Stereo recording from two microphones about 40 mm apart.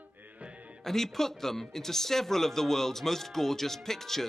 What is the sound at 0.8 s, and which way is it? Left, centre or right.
Speech, centre.